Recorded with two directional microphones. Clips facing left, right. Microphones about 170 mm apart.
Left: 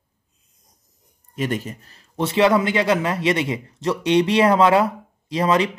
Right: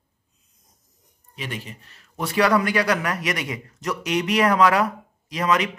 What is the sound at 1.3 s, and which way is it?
A man's voice, 45° left (ahead or behind).